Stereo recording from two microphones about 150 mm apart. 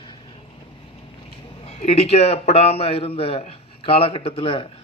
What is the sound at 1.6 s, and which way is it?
A man's voice, 45° left (ahead or behind).